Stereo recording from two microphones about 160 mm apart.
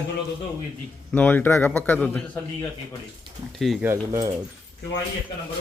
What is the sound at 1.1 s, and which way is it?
A man's voice, 10° left (ahead or behind).